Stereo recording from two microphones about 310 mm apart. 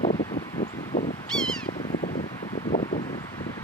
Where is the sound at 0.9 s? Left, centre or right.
Left.